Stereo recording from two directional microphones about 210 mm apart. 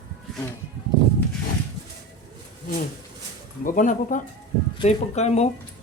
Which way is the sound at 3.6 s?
40° left (ahead or behind).